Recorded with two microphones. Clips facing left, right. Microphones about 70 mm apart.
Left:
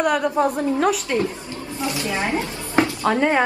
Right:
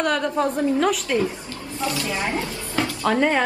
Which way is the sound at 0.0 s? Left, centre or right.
Centre.